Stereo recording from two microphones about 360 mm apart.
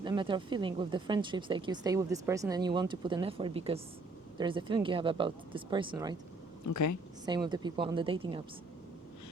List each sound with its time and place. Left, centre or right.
0.0 s speech: centre
6.7 s a woman's voice: left
7.3 s speech: centre